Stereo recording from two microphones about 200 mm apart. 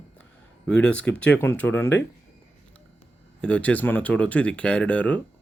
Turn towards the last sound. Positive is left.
turn(degrees=5)  # may be behind; listen again after turning